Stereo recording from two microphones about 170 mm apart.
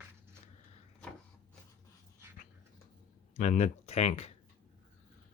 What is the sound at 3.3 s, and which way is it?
Speech, 40° left (ahead or behind).